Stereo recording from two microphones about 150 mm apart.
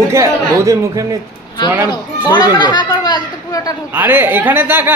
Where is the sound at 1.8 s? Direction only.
25° left (ahead or behind).